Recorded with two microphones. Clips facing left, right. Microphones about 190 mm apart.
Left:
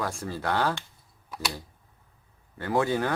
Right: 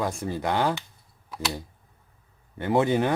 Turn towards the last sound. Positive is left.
turn(degrees=-20)  # may be behind; listen again after turning